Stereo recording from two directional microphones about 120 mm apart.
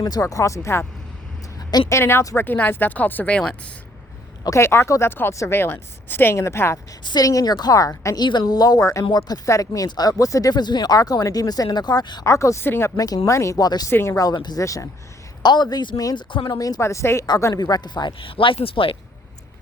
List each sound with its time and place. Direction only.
0.0 s a woman's voice: 30° left (ahead or behind)
1.9 s speech: 20° left (ahead or behind)
4.4 s a woman's voice: 25° left (ahead or behind)
7.0 s speech: 35° left (ahead or behind)
8.2 s speech: 35° left (ahead or behind)
12.2 s a woman's voice: 25° left (ahead or behind)
13.9 s a woman's voice: 20° left (ahead or behind)
14.3 s a woman's voice: 35° left (ahead or behind)
15.4 s speech: 35° left (ahead or behind)
16.6 s a woman's voice: 30° left (ahead or behind); by 18.9 s 50° left (ahead or behind)